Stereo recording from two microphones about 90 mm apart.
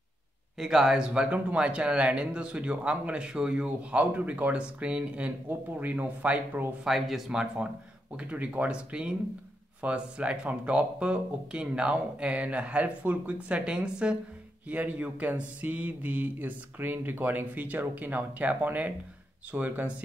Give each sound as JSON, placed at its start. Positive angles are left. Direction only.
{"t": 0.6, "sound": "speech", "side_deg": -5}
{"t": 6.8, "sound": "speech", "side_deg": 0}